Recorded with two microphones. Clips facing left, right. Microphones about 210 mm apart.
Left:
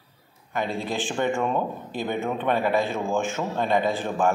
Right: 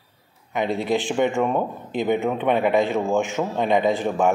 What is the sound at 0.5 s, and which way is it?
A man's voice, 20° right (ahead or behind).